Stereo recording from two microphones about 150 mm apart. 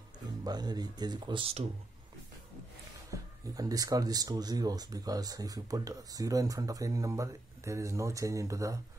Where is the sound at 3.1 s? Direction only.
25° right (ahead or behind).